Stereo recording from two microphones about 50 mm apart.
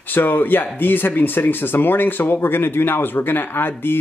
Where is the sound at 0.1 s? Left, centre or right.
Left.